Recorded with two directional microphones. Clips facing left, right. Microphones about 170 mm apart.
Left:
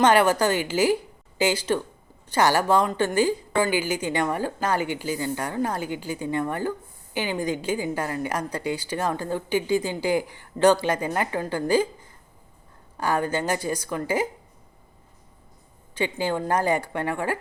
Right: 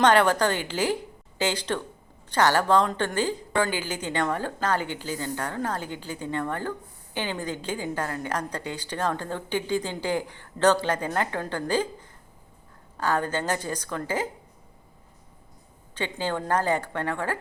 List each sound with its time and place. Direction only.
0.0 s a woman's voice: 10° left (ahead or behind)
13.0 s a woman's voice: 10° left (ahead or behind)
16.0 s a woman's voice: 10° left (ahead or behind)